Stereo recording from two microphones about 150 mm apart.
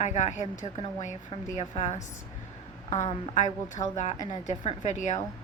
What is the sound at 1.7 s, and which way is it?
A woman's voice, 50° left (ahead or behind).